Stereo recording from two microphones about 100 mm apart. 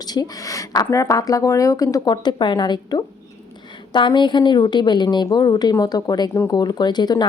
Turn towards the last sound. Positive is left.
turn(degrees=45)  # may be behind; listen again after turning